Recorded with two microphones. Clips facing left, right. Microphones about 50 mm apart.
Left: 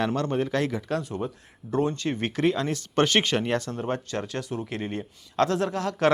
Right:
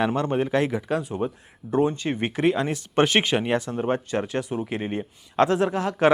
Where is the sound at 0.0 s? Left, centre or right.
Centre.